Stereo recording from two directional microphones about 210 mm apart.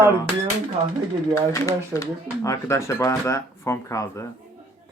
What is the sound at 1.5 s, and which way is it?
Speech, 15° left (ahead or behind).